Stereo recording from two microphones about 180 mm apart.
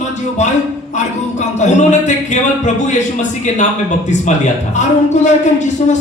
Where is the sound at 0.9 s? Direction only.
40° left (ahead or behind).